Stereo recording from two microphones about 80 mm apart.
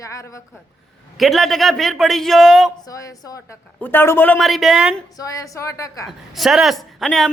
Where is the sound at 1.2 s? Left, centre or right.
Centre.